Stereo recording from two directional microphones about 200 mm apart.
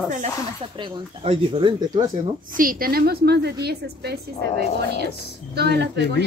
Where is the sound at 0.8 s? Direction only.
25° right (ahead or behind).